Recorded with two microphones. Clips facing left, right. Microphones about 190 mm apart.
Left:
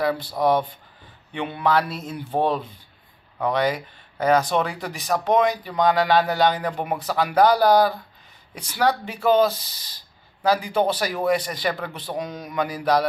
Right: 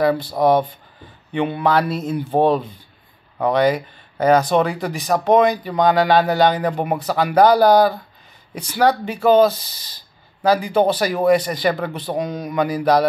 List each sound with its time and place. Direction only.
0.3 s speech: 40° right (ahead or behind)
1.3 s speech: 50° right (ahead or behind)
6.2 s speech: 65° right (ahead or behind)